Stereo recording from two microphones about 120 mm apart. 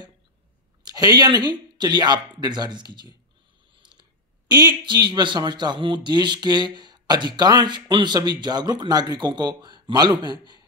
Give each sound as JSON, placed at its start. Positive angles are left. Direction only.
{"t": 0.8, "sound": "speech", "side_deg": -35}